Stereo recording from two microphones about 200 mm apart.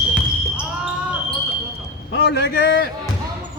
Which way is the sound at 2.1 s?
55° left (ahead or behind).